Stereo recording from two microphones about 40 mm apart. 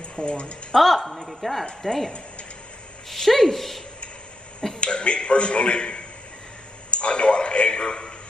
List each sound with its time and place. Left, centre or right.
0.1 s speech: left
0.7 s a woman's voice: centre
4.7 s a man's voice: left